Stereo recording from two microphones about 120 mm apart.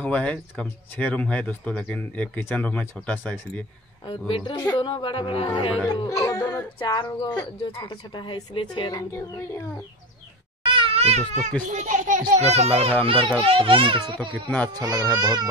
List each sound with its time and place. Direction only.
0.0 s speech: 10° left (ahead or behind)
4.3 s a woman's voice: 40° left (ahead or behind)
5.9 s speech: 30° left (ahead or behind)
6.8 s speech: 45° left (ahead or behind)
7.1 s a woman's voice: 30° left (ahead or behind)
9.1 s speech: 20° left (ahead or behind)
10.6 s cat: 45° right (ahead or behind); by 11.5 s 75° right (ahead or behind)
11.6 s a child's voice: 90° right; by 15.4 s 35° right (ahead or behind)